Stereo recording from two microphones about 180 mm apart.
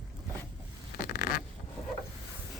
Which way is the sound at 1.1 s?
55° left (ahead or behind).